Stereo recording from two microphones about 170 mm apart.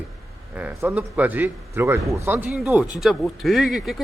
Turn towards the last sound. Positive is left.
turn(degrees=0)  # may be behind; listen again after turning